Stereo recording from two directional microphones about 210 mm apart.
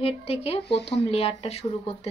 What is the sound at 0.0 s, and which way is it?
Speech, 30° left (ahead or behind).